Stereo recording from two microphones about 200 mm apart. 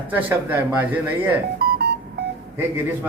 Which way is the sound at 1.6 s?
55° right (ahead or behind).